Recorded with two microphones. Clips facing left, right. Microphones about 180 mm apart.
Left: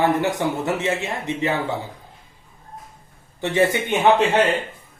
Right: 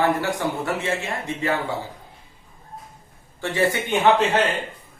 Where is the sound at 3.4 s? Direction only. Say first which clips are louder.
Left 3 dB; 20° left (ahead or behind).